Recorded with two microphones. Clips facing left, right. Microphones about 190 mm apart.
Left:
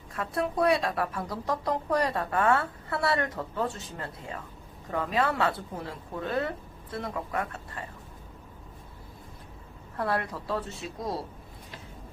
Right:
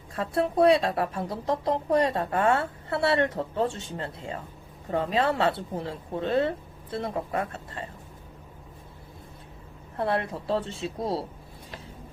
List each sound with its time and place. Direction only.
0.1 s speech: 30° right (ahead or behind)
10.0 s speech: 25° right (ahead or behind)